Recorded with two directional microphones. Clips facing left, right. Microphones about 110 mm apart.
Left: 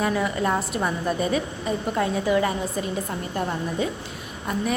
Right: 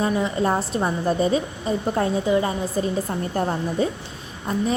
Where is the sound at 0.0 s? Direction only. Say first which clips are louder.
Right 2 dB; 25° right (ahead or behind).